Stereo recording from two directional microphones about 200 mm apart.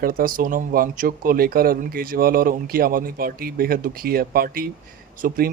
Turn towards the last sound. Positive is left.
turn(degrees=-50)  # may be behind; listen again after turning